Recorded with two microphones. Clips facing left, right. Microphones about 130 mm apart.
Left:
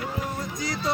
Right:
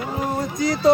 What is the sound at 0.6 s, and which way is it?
Music, 60° right (ahead or behind).